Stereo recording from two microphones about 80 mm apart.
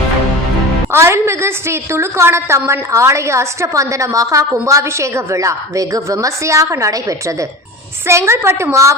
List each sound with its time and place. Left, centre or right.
0.9 s a woman's voice: right